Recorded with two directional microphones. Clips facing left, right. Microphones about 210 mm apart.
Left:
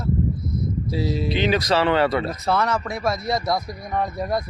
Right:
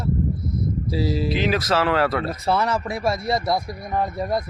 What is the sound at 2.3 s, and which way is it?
Speech, 30° right (ahead or behind).